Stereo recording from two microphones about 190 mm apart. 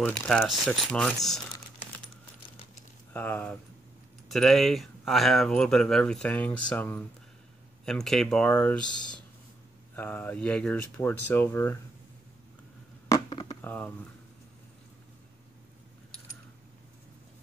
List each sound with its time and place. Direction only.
0.0 s speech: 5° left (ahead or behind)
3.1 s speech: 10° left (ahead or behind)
13.1 s a sound: 25° left (ahead or behind)
13.6 s speech: 10° left (ahead or behind)